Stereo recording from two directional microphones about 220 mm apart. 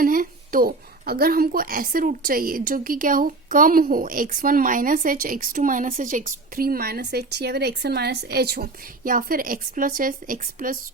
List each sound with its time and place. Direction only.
0.0 s a woman's voice: 40° right (ahead or behind)